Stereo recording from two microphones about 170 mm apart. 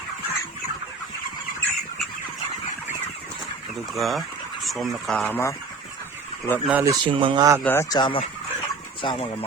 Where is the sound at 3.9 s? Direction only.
Centre (ahead or behind).